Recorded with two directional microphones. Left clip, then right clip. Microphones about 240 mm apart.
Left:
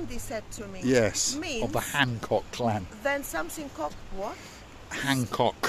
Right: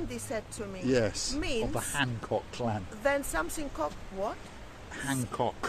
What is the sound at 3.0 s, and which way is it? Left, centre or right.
Speech, centre.